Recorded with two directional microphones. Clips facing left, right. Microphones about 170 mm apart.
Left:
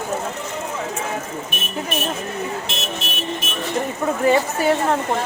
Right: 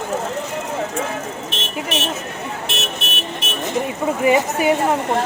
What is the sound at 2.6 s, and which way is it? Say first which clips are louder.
Vehicle: right 1 dB; 65° right (ahead or behind).